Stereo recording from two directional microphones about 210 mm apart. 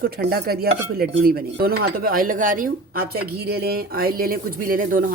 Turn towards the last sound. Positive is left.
turn(degrees=-40)  # may be behind; listen again after turning